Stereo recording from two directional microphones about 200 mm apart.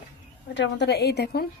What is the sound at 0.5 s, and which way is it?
Speech, 60° left (ahead or behind).